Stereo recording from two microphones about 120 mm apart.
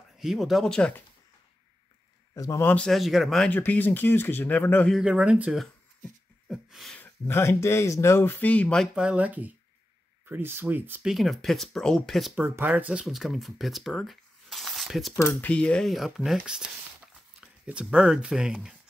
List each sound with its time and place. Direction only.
0.2 s speech: centre (ahead or behind)
2.3 s a man's voice: 30° left (ahead or behind)
2.6 s speech: 10° left (ahead or behind)
2.9 s speech: centre (ahead or behind)
3.5 s speech: 15° left (ahead or behind)
5.0 s speech: 10° right (ahead or behind)
6.5 s a sound: centre (ahead or behind)
7.0 s speech: 20° left (ahead or behind)
8.9 s speech: 10° right (ahead or behind)
11.1 s speech: centre (ahead or behind)
12.4 s speech: 20° right (ahead or behind); by 15.1 s centre (ahead or behind)
15.1 s speech: 15° left (ahead or behind); by 18.8 s 5° right (ahead or behind)